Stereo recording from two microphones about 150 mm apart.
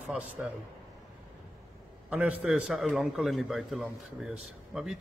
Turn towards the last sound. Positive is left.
turn(degrees=-5)  # may be behind; listen again after turning